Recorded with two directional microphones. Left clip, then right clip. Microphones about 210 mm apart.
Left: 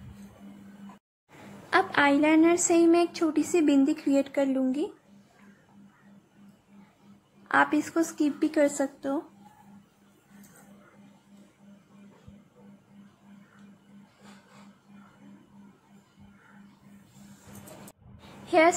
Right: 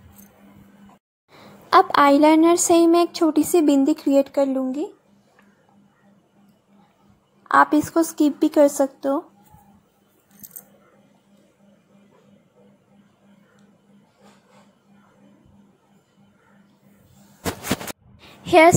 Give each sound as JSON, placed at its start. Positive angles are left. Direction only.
{"t": 1.7, "sound": "speech", "side_deg": -30}
{"t": 7.4, "sound": "speech", "side_deg": -15}
{"t": 18.1, "sound": "a sound", "side_deg": -30}